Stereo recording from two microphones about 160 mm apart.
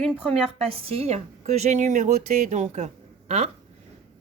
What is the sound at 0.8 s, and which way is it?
Speech, 40° right (ahead or behind).